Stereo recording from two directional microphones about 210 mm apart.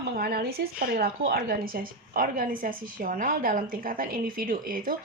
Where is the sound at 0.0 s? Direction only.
50° right (ahead or behind).